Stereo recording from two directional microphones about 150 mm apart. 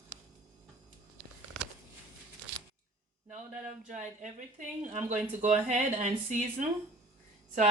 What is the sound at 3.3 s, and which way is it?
Speech, 55° right (ahead or behind).